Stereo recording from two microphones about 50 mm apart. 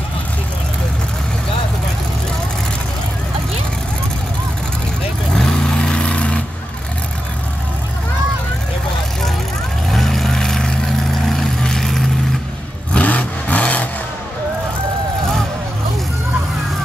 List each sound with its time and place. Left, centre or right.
5.3 s vehicle: centre
9.8 s vehicle: centre
12.9 s vehicle: left